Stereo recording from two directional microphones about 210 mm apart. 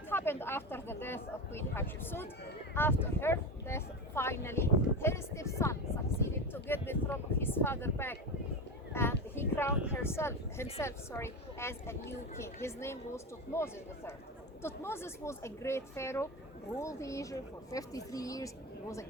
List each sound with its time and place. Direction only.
0.1 s speech: 10° left (ahead or behind)
8.9 s a sound: 10° left (ahead or behind)
9.9 s speech: 10° left (ahead or behind)